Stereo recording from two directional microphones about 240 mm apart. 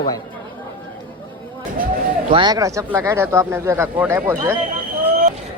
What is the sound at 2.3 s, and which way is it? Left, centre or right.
Speech, centre.